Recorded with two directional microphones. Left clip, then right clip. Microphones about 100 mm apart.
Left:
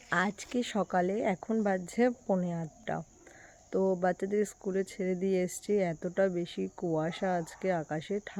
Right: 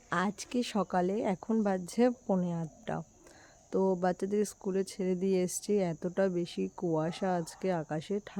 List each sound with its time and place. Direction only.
0.1 s speech: 30° right (ahead or behind)